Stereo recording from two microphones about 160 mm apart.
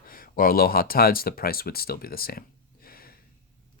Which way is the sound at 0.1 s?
65° left (ahead or behind).